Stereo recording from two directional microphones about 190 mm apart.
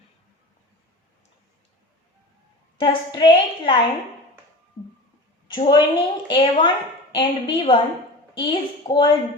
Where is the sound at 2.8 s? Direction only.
25° left (ahead or behind).